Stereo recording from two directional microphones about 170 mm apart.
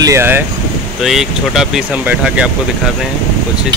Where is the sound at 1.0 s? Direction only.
Centre (ahead or behind).